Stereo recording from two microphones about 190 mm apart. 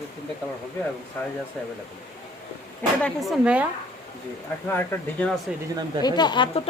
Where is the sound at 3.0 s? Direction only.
Centre (ahead or behind).